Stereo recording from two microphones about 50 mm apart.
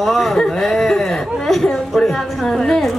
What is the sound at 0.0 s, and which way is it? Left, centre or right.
A woman's voice, centre.